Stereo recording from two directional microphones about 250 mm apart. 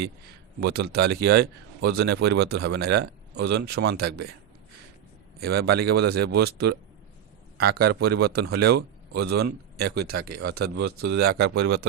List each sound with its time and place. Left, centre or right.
0.9 s a man's voice: right
5.4 s a man's voice: right